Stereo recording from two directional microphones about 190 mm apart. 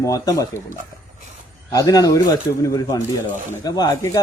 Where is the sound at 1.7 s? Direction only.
20° left (ahead or behind).